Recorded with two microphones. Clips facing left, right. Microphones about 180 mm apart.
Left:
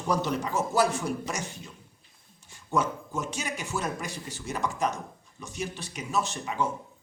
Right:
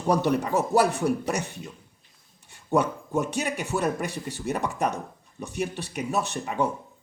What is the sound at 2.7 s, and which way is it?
A man's voice, 60° right (ahead or behind).